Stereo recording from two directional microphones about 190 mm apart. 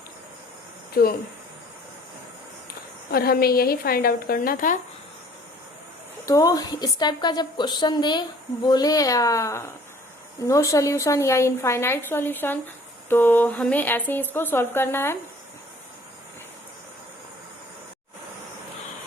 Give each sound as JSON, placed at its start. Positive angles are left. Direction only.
{"t": 0.9, "sound": "a woman's voice", "side_deg": 50}
{"t": 3.1, "sound": "a woman's voice", "side_deg": 50}
{"t": 6.2, "sound": "a woman's voice", "side_deg": 20}